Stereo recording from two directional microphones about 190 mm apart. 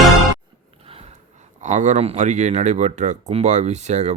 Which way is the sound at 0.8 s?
30° right (ahead or behind).